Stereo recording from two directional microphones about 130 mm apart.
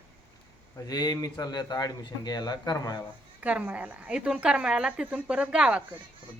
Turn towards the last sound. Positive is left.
turn(degrees=-10)  # may be behind; listen again after turning